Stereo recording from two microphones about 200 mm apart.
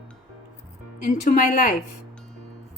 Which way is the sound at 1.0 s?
40° left (ahead or behind).